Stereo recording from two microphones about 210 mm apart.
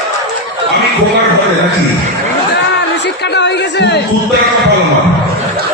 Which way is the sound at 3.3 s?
55° left (ahead or behind).